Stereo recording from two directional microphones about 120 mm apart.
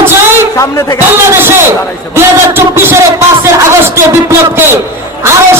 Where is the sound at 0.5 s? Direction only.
25° left (ahead or behind).